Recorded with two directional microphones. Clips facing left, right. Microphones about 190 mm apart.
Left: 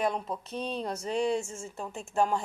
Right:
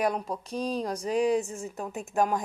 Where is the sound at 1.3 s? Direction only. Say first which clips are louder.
Right 4 dB; 35° right (ahead or behind).